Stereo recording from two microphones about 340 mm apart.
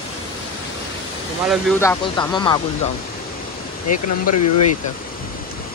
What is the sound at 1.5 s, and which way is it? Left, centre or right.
Speech, centre.